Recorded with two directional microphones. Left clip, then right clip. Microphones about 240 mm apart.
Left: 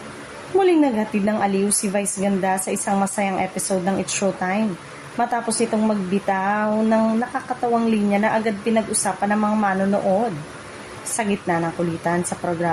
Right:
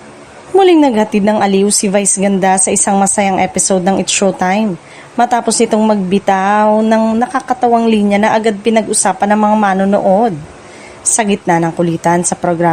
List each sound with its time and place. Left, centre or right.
0.6 s a woman's voice: right
11.2 s a woman's voice: right